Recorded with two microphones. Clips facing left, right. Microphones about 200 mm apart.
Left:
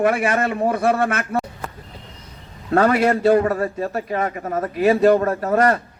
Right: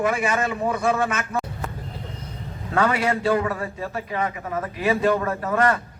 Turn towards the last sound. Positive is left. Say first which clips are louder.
# left 4 dB
turn(degrees=40)  # may be behind; listen again after turning